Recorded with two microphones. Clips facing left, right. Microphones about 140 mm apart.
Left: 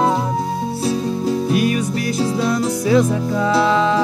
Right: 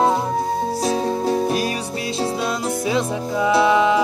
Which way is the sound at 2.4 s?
20° right (ahead or behind).